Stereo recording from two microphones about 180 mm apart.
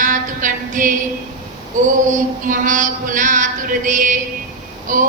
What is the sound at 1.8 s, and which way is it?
Speech, 45° right (ahead or behind).